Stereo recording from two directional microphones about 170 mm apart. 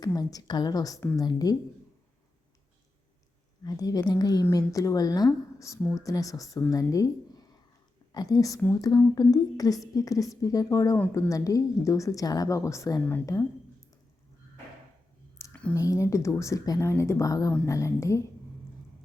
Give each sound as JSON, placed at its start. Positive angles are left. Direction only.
{"t": 0.0, "sound": "a woman's voice", "side_deg": 20}
{"t": 3.6, "sound": "a woman's voice", "side_deg": 20}
{"t": 15.4, "sound": "a sound", "side_deg": 10}
{"t": 15.7, "sound": "a woman's voice", "side_deg": 20}